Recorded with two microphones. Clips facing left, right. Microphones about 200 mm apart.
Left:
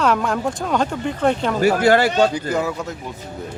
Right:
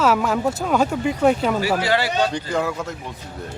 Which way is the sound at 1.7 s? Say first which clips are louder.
Left 5 dB; 50° left (ahead or behind).